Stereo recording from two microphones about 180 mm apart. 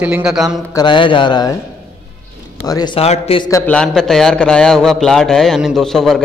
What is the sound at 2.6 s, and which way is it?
Speech, 20° left (ahead or behind).